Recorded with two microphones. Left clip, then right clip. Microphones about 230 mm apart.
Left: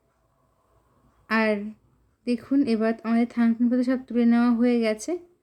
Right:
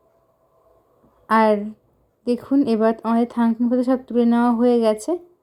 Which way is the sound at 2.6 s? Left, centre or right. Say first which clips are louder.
Right 6 dB; centre.